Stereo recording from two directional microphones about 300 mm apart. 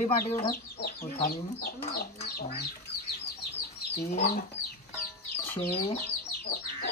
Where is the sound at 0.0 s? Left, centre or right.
Left.